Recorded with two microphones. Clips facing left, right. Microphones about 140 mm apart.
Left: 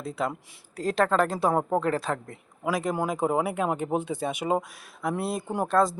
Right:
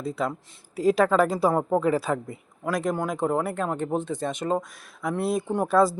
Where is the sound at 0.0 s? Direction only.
Centre (ahead or behind).